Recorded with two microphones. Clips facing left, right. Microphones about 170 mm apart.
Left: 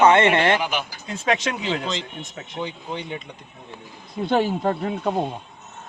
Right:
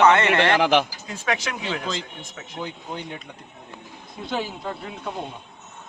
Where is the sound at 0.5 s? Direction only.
90° right.